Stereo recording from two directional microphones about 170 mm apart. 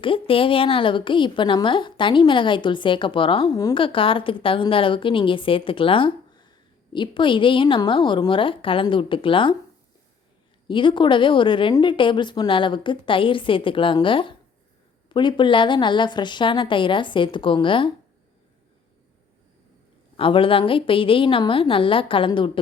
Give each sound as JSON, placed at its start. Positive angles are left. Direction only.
{"t": 0.0, "sound": "a woman's voice", "side_deg": 30}
{"t": 10.7, "sound": "a woman's voice", "side_deg": 30}
{"t": 20.1, "sound": "a woman's voice", "side_deg": 30}